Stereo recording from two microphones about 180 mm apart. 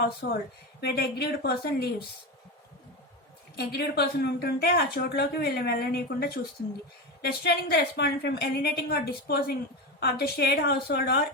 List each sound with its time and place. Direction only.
0.0 s speech: 65° left (ahead or behind)
3.5 s speech: 65° left (ahead or behind)